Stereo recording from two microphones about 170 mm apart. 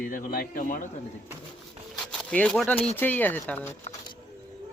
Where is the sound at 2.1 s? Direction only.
5° left (ahead or behind).